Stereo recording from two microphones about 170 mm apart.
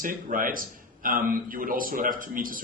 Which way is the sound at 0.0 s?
55° right (ahead or behind).